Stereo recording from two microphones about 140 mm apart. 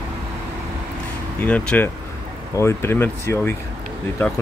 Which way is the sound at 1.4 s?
10° left (ahead or behind).